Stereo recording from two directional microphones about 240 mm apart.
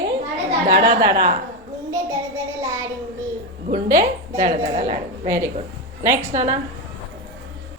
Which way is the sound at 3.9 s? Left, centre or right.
Right.